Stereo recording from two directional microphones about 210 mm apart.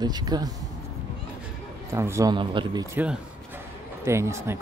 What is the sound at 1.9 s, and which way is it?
Speech, 15° right (ahead or behind).